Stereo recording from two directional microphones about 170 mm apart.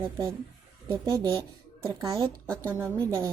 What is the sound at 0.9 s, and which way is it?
Speech, 20° right (ahead or behind).